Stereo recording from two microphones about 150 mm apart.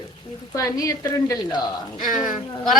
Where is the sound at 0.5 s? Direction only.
20° left (ahead or behind).